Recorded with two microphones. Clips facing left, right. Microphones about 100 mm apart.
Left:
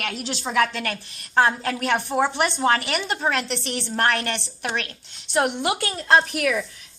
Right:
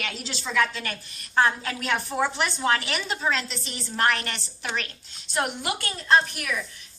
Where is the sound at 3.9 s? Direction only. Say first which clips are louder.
Left 2 dB; 55° left (ahead or behind); by 6.6 s 80° left.